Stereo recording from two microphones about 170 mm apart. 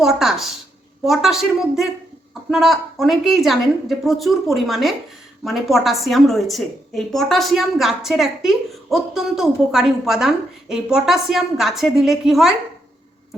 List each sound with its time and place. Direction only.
0.0 s a woman's voice: centre (ahead or behind)